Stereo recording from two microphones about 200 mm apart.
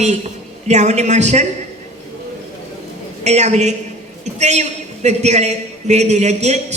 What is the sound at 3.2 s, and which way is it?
A woman's voice, 35° right (ahead or behind).